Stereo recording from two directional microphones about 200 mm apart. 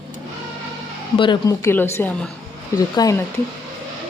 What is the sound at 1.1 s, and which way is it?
A woman's voice, 25° left (ahead or behind).